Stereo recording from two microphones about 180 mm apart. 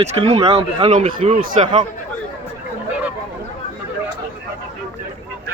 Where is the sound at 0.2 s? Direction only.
30° right (ahead or behind).